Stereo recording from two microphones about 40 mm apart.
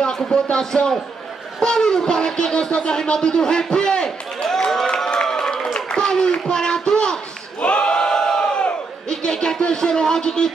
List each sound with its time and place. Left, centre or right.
0.0 s speech: centre
4.8 s a sound: left
7.6 s crowd: left
8.1 s crowd: centre
8.4 s crowd: left
9.1 s a sound: centre